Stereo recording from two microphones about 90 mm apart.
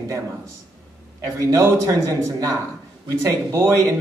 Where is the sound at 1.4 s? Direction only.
40° right (ahead or behind).